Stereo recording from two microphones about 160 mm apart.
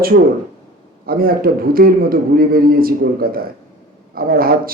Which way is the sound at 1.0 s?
65° right (ahead or behind).